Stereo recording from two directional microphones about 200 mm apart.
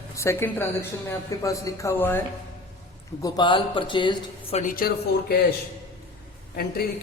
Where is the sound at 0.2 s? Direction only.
15° left (ahead or behind).